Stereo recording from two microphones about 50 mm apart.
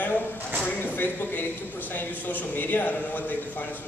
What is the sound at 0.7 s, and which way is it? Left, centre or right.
A man's voice, left.